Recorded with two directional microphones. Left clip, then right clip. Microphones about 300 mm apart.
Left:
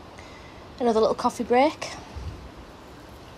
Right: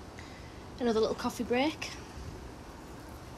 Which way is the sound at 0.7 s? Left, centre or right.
Centre.